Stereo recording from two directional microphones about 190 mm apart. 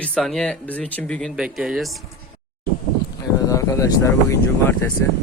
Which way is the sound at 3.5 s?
15° left (ahead or behind).